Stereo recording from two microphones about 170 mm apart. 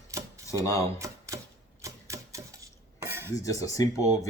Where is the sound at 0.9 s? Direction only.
20° right (ahead or behind).